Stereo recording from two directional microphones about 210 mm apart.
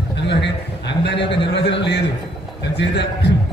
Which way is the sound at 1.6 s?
55° left (ahead or behind).